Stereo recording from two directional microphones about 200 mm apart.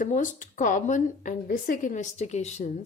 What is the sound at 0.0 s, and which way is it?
A woman's voice, 40° left (ahead or behind).